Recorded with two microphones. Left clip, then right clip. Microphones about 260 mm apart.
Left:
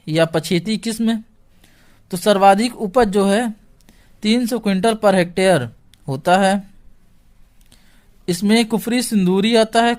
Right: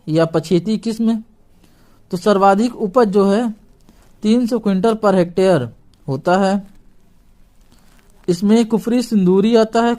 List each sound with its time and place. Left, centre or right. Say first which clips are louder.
0.0 s a woman's voice: right 1 dB; left
8.3 s speech: right 2 dB; left